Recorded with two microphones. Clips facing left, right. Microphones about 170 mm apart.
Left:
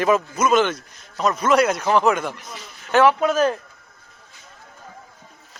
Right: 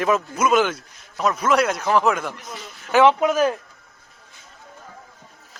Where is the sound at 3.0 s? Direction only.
15° right (ahead or behind).